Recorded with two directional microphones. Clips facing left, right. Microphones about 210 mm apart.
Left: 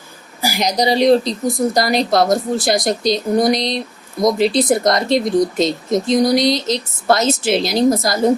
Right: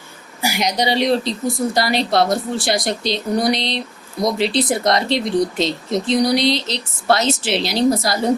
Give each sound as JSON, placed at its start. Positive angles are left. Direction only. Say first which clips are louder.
{"t": 0.4, "sound": "speech", "louder": "left 2 dB", "side_deg": 35}